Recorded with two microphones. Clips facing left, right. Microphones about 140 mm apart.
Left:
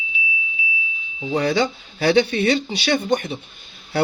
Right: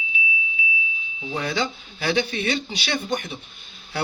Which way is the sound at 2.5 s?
35° left (ahead or behind).